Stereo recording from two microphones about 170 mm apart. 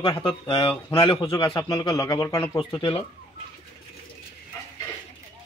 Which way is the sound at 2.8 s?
35° left (ahead or behind).